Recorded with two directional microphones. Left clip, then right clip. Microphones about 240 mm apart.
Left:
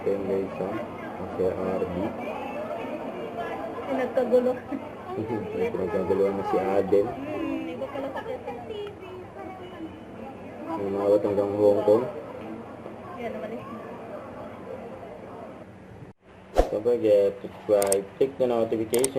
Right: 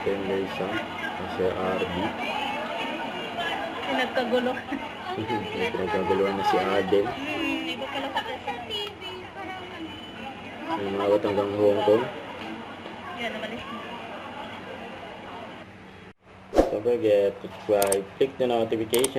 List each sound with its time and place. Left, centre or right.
0.0 s speech: centre
10.7 s speech: centre
13.1 s speech: centre
16.6 s a sound: centre
17.0 s speech: centre